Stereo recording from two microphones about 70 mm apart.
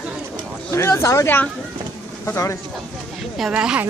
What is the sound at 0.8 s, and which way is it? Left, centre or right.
Speech, left.